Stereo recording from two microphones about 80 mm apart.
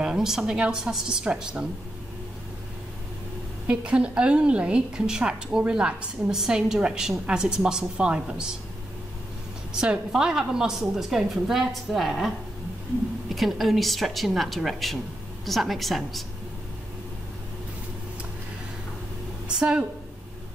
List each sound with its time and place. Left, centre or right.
0.0 s a woman's voice: centre
3.6 s a woman's voice: centre
9.8 s a woman's voice: centre
13.3 s a woman's voice: centre
19.4 s a sound: centre